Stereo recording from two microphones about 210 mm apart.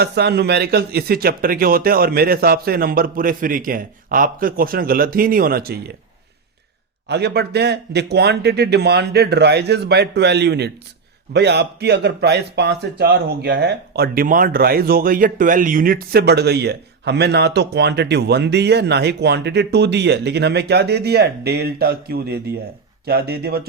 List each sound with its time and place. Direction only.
0.0 s speech: 50° right (ahead or behind)
7.1 s speech: 50° right (ahead or behind)